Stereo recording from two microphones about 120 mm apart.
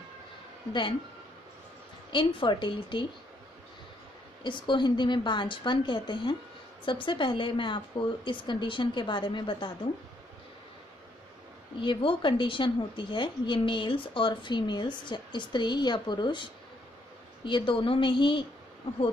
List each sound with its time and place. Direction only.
2.1 s a woman's voice: 40° left (ahead or behind)
4.4 s a woman's voice: 40° left (ahead or behind)
11.8 s a woman's voice: 45° left (ahead or behind)
17.5 s speech: 45° left (ahead or behind)